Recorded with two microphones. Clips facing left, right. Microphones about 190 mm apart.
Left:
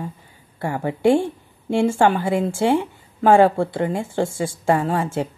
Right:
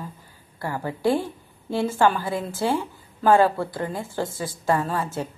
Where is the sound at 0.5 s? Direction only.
25° left (ahead or behind).